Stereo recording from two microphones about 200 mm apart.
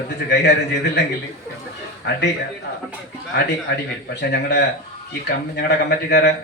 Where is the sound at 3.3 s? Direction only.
55° left (ahead or behind).